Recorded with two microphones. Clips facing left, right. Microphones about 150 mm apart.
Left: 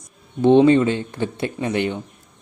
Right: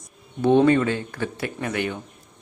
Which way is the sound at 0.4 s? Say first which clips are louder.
Left 4 dB; 20° left (ahead or behind).